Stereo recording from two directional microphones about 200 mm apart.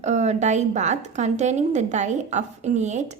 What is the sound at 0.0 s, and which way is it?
A woman's voice, 35° right (ahead or behind).